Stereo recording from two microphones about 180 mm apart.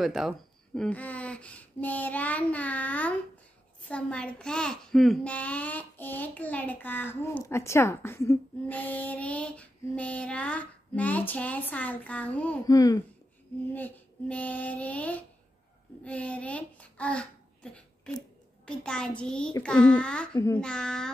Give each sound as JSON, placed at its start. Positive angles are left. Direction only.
{"t": 0.0, "sound": "a child's voice", "side_deg": 0}
{"t": 12.6, "sound": "speech", "side_deg": 20}
{"t": 13.7, "sound": "a child's voice", "side_deg": 10}
{"t": 18.7, "sound": "a child's voice", "side_deg": 5}
{"t": 20.3, "sound": "a child's voice", "side_deg": 15}
{"t": 20.6, "sound": "a child's voice", "side_deg": 5}